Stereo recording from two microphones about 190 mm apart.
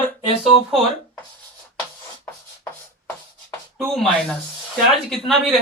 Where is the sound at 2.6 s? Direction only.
10° left (ahead or behind).